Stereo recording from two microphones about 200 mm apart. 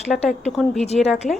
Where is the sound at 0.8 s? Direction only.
35° left (ahead or behind).